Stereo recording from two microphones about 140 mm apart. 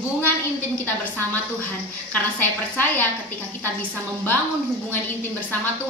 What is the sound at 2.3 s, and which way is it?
Speech, 15° left (ahead or behind).